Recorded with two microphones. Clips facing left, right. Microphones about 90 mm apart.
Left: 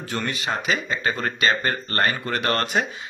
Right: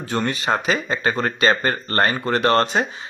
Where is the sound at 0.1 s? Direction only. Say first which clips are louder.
Right 6 dB; 35° right (ahead or behind).